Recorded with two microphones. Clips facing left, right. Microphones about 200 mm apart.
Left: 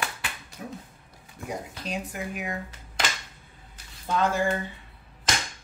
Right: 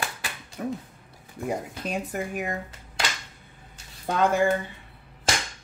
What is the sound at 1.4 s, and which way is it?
Speech, 55° right (ahead or behind).